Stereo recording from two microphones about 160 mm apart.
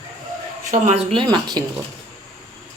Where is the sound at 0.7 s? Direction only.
45° right (ahead or behind).